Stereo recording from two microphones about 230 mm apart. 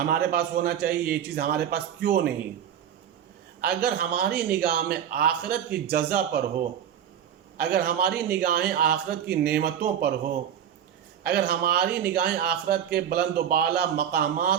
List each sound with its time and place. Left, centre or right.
0.0 s a man's voice: right
3.6 s a man's voice: right
7.5 s a man's voice: right
11.3 s a man's voice: right